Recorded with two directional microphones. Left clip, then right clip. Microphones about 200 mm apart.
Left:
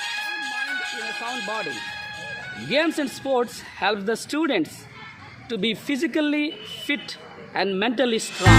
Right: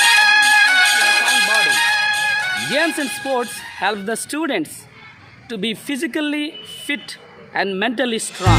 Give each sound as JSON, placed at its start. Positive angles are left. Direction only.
{"t": 0.0, "sound": "music", "side_deg": -50}
{"t": 2.6, "sound": "speech", "side_deg": -35}